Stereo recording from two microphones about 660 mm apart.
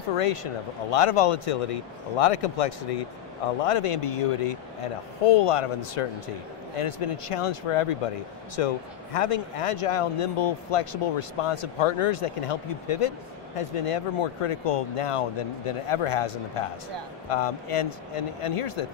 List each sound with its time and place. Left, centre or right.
0.2 s speech: left